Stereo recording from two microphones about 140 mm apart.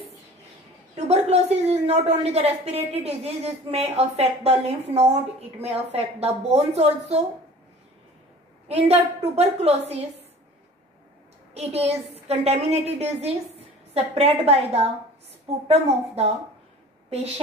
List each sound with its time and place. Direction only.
0.9 s a woman's voice: 45° right (ahead or behind)
8.6 s a woman's voice: 50° right (ahead or behind)
11.5 s a woman's voice: 45° right (ahead or behind)